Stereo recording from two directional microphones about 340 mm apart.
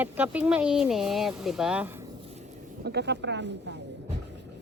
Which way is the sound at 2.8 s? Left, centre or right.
Right.